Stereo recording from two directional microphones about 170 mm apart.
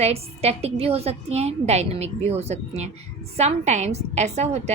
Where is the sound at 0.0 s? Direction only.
35° right (ahead or behind).